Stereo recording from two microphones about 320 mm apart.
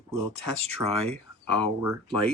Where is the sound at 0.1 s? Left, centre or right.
Centre.